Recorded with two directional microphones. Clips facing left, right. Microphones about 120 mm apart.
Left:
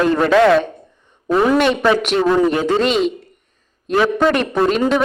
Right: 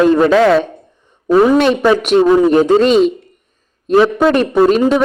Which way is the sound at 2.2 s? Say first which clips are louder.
Right 4 dB; 15° right (ahead or behind).